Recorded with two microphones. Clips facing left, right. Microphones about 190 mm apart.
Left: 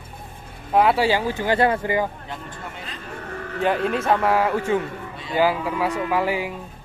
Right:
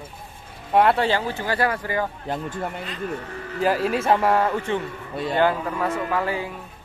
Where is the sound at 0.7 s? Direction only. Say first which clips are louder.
Left 1 dB; 5° left (ahead or behind); by 2.0 s 20° left (ahead or behind).